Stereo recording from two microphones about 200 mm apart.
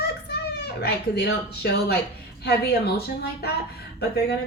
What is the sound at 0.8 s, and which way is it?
Speech, 55° left (ahead or behind).